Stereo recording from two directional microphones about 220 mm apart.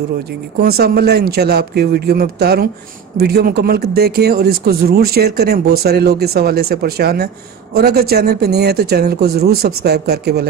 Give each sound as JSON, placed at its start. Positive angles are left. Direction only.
{"t": 0.6, "sound": "speech", "side_deg": -45}